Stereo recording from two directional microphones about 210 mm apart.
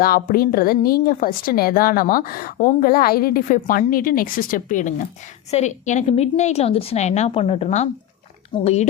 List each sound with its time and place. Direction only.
0.0 s a woman's voice: 45° left (ahead or behind)